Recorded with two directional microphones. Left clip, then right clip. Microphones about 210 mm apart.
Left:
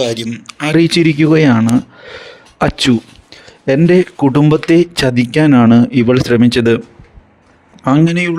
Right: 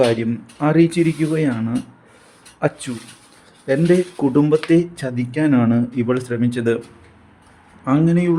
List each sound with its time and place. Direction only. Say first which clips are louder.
0.2 s speech: left 2 dB; 50° left (ahead or behind)
7.9 s speech: left 5 dB; 40° left (ahead or behind)